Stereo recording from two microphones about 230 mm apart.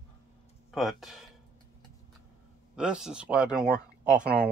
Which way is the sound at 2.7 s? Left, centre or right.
Centre.